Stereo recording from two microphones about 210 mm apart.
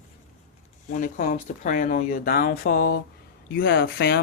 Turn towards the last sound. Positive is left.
turn(degrees=50)  # may be behind; listen again after turning